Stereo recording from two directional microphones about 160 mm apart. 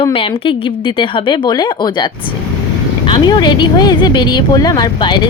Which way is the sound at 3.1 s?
30° left (ahead or behind).